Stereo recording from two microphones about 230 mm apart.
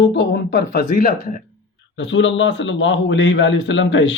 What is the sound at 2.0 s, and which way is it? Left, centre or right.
A man's voice, left.